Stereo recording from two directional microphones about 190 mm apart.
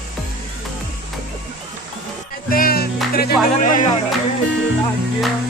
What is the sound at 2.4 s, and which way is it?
Music, 50° left (ahead or behind).